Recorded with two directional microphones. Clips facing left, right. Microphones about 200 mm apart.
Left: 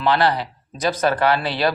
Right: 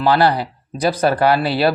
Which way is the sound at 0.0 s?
35° right (ahead or behind).